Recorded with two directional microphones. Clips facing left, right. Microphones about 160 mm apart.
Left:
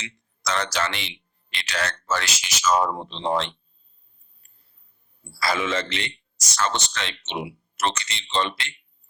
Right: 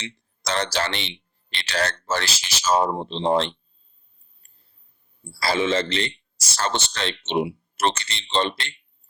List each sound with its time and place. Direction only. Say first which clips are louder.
0.0 s a man's voice: even; 30° right (ahead or behind)
5.4 s a man's voice: right 3 dB; 30° right (ahead or behind)